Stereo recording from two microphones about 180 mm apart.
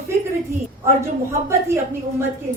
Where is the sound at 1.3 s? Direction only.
15° right (ahead or behind).